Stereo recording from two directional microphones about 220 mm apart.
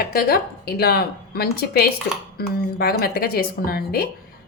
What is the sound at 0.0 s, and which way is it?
A woman's voice, 45° left (ahead or behind).